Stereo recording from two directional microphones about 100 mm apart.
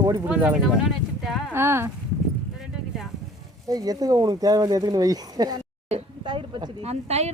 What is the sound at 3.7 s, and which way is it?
Speech, 40° right (ahead or behind).